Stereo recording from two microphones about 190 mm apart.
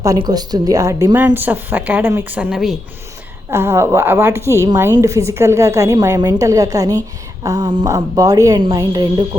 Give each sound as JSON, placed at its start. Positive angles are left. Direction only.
{"t": 0.0, "sound": "a woman's voice", "side_deg": -20}
{"t": 3.5, "sound": "a woman's voice", "side_deg": -15}